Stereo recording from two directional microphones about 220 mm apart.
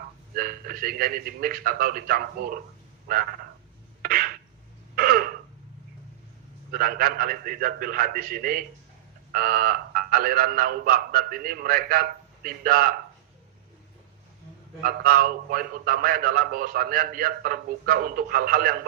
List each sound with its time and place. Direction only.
0.3 s a man's voice: 40° right (ahead or behind)
4.0 s a sound: 40° right (ahead or behind)
4.9 s throat clearing: 40° right (ahead or behind)
6.7 s a man's voice: 40° right (ahead or behind)
14.8 s a man's voice: 40° right (ahead or behind)